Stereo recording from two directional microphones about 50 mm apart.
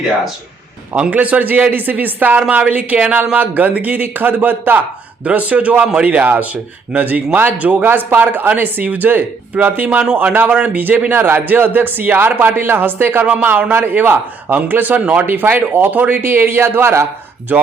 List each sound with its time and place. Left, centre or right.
1.1 s a man's voice: right
7.9 s speech: right
16.2 s speech: right
17.5 s speech: right